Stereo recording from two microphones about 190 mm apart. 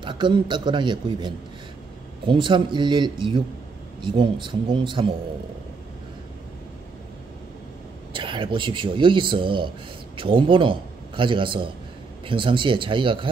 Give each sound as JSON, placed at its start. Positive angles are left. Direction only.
{"t": 0.0, "sound": "speech", "side_deg": -25}
{"t": 8.1, "sound": "a man's voice", "side_deg": -25}